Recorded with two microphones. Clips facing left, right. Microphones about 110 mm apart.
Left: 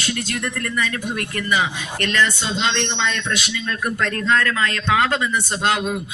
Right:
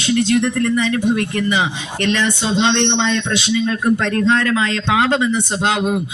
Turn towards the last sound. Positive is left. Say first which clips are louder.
# right 3 dB
turn(degrees=-20)  # may be behind; listen again after turning